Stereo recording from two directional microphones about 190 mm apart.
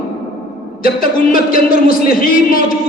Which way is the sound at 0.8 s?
50° left (ahead or behind).